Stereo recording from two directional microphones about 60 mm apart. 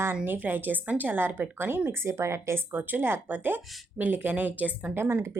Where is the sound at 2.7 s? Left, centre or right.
Right.